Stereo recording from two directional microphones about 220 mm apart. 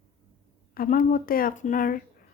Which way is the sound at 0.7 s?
40° left (ahead or behind).